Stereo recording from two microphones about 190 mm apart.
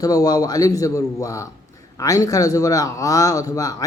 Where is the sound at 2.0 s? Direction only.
15° left (ahead or behind).